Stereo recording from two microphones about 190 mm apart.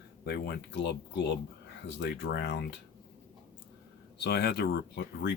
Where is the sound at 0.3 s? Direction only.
60° left (ahead or behind).